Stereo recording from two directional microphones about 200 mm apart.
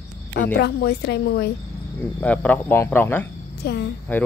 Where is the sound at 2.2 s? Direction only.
5° left (ahead or behind).